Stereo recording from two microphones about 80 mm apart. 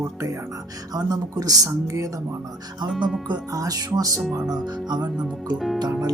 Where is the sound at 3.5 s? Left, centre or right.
Right.